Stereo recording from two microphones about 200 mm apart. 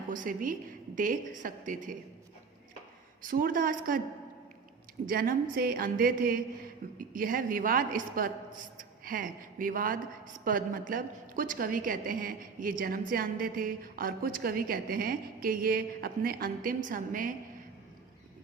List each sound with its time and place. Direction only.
0.1 s a woman's voice: 40° right (ahead or behind)
3.2 s a woman's voice: 45° right (ahead or behind)
5.0 s a woman's voice: 45° right (ahead or behind)